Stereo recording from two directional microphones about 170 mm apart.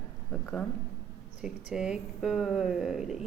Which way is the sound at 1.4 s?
5° right (ahead or behind).